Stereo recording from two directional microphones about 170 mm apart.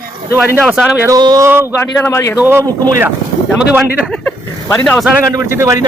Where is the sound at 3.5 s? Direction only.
5° right (ahead or behind).